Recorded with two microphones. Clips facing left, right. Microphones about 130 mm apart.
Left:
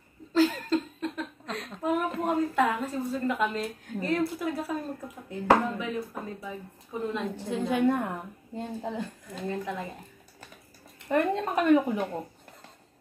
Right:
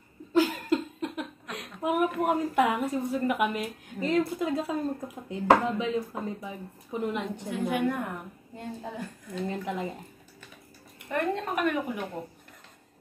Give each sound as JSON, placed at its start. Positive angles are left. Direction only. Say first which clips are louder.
{"t": 0.3, "sound": "a sound", "louder": "even", "side_deg": -15}
{"t": 2.7, "sound": "a woman's voice", "louder": "right 2 dB", "side_deg": -15}
{"t": 7.7, "sound": "a woman's voice", "louder": "left 5 dB", "side_deg": 25}
{"t": 9.5, "sound": "a woman's voice", "louder": "left 1 dB", "side_deg": -20}
{"t": 11.1, "sound": "a woman's voice", "louder": "left 3 dB", "side_deg": 20}